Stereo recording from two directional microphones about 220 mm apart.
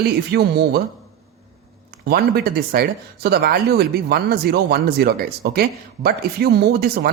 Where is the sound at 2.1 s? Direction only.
45° right (ahead or behind).